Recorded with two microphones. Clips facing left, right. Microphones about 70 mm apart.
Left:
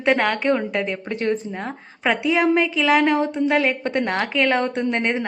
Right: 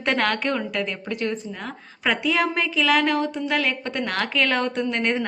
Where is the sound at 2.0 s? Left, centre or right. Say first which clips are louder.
Left 4 dB; centre.